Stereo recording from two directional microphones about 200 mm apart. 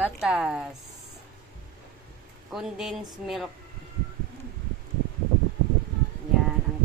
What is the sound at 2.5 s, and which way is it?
Speech, centre (ahead or behind).